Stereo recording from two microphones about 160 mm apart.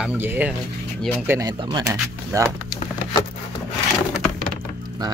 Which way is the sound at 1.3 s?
25° right (ahead or behind).